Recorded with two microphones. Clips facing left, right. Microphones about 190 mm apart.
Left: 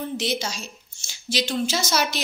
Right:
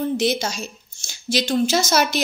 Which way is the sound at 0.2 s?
45° right (ahead or behind).